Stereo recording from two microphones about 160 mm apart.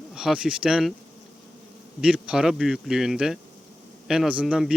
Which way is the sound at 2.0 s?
5° right (ahead or behind).